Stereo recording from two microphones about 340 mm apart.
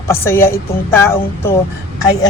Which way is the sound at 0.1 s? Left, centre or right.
Centre.